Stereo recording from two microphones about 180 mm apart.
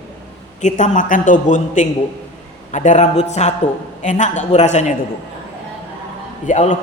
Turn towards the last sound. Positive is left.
turn(degrees=45)  # may be behind; listen again after turning